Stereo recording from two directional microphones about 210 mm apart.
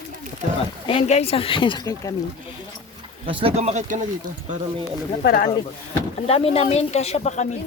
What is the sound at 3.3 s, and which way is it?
Speech, 25° right (ahead or behind).